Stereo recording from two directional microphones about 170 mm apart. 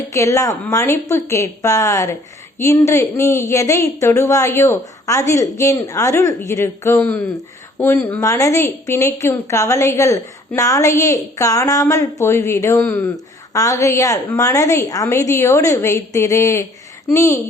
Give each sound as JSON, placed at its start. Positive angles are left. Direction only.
{"t": 0.1, "sound": "a woman's voice", "side_deg": 20}